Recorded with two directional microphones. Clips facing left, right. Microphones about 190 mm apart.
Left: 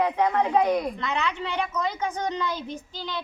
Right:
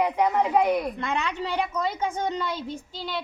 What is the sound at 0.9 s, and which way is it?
A woman's voice, 50° right (ahead or behind).